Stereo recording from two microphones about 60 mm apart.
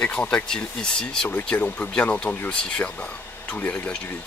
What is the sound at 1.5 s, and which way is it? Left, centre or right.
Speech, left.